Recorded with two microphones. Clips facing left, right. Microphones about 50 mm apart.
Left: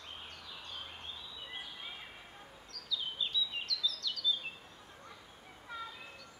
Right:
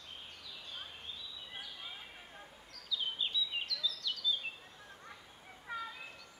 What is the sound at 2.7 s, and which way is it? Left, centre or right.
Chirp, centre.